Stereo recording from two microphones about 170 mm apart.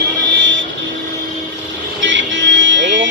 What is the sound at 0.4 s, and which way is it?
Vehicle, 90° right.